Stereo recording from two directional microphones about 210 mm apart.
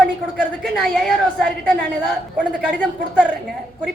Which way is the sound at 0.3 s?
Centre (ahead or behind).